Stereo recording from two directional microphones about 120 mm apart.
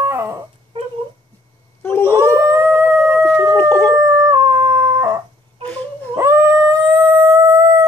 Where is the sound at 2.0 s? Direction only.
20° right (ahead or behind).